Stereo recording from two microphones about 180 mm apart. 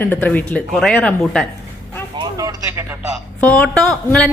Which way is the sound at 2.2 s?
20° right (ahead or behind).